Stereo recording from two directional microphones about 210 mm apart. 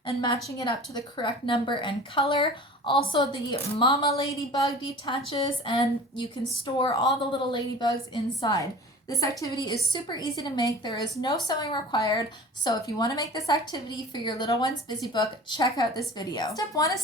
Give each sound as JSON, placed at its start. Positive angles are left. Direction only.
{"t": 0.0, "sound": "a woman's voice", "side_deg": 20}
{"t": 6.7, "sound": "a woman's voice", "side_deg": 25}